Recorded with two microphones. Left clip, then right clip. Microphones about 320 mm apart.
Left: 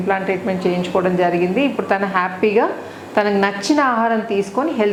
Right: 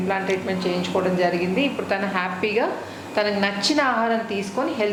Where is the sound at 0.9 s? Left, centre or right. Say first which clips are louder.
Left 4 dB; left.